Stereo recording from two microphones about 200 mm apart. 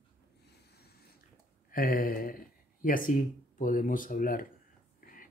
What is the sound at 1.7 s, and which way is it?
Speech, 45° left (ahead or behind).